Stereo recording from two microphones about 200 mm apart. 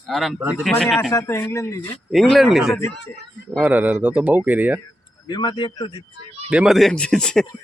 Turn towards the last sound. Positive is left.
turn(degrees=5)  # may be behind; listen again after turning